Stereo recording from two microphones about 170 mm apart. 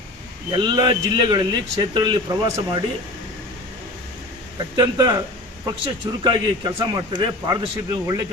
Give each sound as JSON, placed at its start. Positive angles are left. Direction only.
{"t": 0.6, "sound": "a man's voice", "side_deg": -25}
{"t": 4.8, "sound": "a man's voice", "side_deg": -20}